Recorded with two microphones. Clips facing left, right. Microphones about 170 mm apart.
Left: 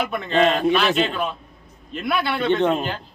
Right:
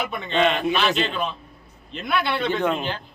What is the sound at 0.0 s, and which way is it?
A man's voice, centre (ahead or behind).